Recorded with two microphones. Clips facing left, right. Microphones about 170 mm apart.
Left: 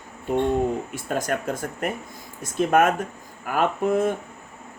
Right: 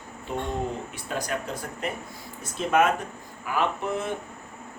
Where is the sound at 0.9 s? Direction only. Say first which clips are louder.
Left 5 dB; 50° left (ahead or behind).